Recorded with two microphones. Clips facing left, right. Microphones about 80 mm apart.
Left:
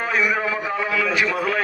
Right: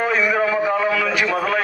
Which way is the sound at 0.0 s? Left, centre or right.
Centre.